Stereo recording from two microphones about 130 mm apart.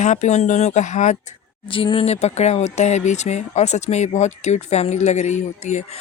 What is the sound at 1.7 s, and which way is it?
Speech, 45° left (ahead or behind).